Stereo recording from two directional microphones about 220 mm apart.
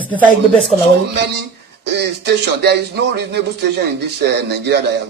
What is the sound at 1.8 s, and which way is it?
Speech, 50° right (ahead or behind).